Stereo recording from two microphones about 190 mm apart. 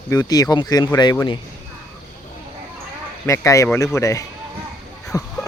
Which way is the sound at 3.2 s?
15° left (ahead or behind).